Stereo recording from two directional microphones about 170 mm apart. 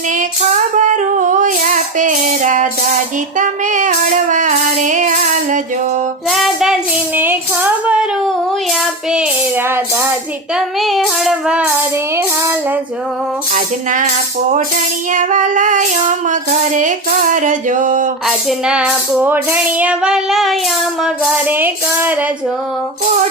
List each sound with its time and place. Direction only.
0.8 s female singing: 45° right (ahead or behind)
3.3 s child singing: 45° right (ahead or behind)
6.3 s child singing: centre (ahead or behind)
7.2 s female singing: 10° right (ahead or behind)
9.1 s child singing: 10° right (ahead or behind)
10.5 s a sound: centre (ahead or behind)
13.5 s child singing: 50° right (ahead or behind)
15.1 s child singing: 50° right (ahead or behind)
18.3 s a sound: 5° right (ahead or behind)
21.0 s music: 10° right (ahead or behind)